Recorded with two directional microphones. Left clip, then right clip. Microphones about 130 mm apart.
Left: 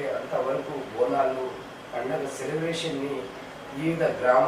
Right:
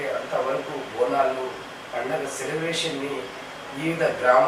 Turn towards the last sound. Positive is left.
turn(degrees=20)  # may be behind; listen again after turning